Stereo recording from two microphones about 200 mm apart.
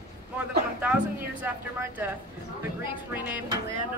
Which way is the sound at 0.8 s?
5° right (ahead or behind).